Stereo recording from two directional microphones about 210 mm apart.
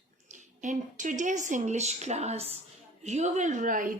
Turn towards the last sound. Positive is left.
turn(degrees=-40)  # may be behind; listen again after turning